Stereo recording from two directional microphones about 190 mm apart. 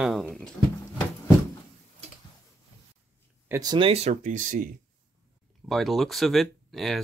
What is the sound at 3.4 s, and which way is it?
Speech, 20° right (ahead or behind).